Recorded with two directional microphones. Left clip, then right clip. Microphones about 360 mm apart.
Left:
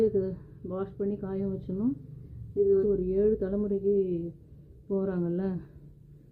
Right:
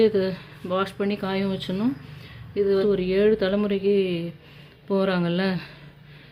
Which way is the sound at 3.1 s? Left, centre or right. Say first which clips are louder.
Right 6 dB; centre.